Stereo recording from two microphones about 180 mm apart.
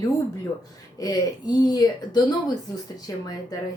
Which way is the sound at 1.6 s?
20° left (ahead or behind).